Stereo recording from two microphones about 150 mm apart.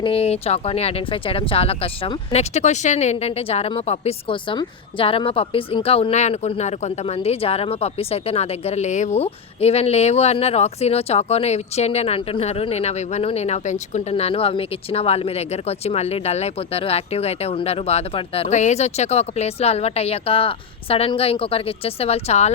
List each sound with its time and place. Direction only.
0.0 s speech: 40° left (ahead or behind)